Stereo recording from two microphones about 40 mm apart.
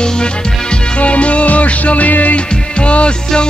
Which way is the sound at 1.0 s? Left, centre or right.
Left.